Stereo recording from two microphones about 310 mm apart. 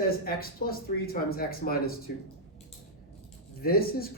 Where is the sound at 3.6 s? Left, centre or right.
Left.